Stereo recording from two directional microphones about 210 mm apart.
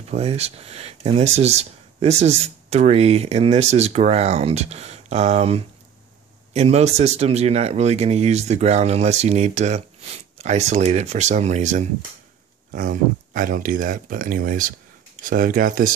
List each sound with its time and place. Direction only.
0.1 s speech: 30° right (ahead or behind)